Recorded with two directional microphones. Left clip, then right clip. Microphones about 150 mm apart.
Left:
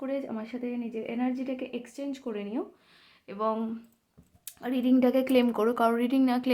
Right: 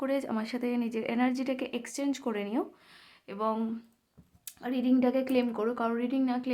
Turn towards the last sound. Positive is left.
turn(degrees=25)  # may be behind; listen again after turning